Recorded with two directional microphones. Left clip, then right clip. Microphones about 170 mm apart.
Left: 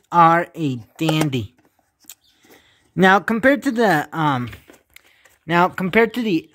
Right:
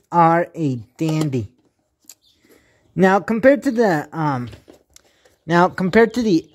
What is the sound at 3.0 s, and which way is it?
Speech, 10° right (ahead or behind).